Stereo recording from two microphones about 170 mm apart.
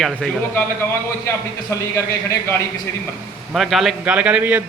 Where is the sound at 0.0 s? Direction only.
5° left (ahead or behind).